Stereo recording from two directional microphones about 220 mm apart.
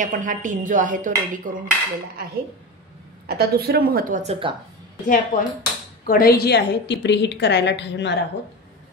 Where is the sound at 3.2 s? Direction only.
45° right (ahead or behind); by 4.5 s 25° right (ahead or behind).